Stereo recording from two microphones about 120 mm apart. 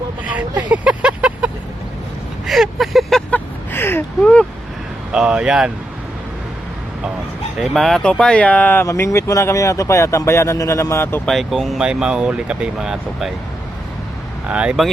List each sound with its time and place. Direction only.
0.3 s vehicle: 15° right (ahead or behind)
2.5 s vehicle: centre (ahead or behind)
5.1 s speech: 5° right (ahead or behind)
7.6 s speech: centre (ahead or behind); by 11.2 s 20° left (ahead or behind)
11.3 s speech: centre (ahead or behind)
14.4 s speech: 10° right (ahead or behind)